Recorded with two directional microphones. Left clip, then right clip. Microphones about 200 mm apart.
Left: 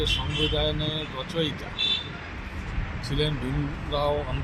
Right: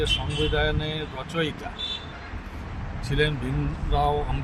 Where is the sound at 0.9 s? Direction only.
25° right (ahead or behind).